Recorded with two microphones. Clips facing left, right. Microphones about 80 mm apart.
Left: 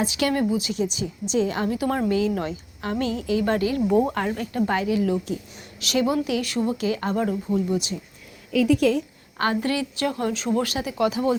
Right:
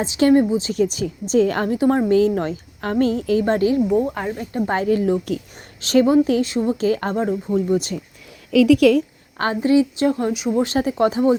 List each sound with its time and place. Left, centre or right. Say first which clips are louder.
0.0 s speech: right 7 dB; right
0.7 s a woman's voice: right 6 dB; right
3.8 s speech: right 1 dB; centre
4.4 s speech: right 1 dB; right
4.7 s a woman's voice: right 6 dB; right
6.4 s a woman's voice: right 5 dB; right
7.2 s a woman's voice: right 3 dB; right
8.5 s a woman's voice: right 6 dB; right
9.0 s a sound: right 4 dB; right
9.6 s speech: right 8 dB; right
10.3 s speech: right 3 dB; centre
10.8 s a woman's voice: right 6 dB; right